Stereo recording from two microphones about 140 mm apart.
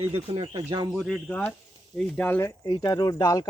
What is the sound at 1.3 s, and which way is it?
Speech, 15° left (ahead or behind).